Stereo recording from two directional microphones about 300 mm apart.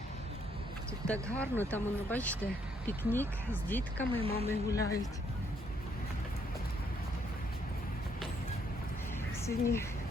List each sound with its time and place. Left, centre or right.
1.0 s speech: centre
4.2 s speech: centre
4.4 s speech: centre
9.5 s speech: centre